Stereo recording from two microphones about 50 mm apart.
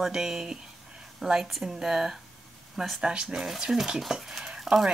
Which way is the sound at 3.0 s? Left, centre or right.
Centre.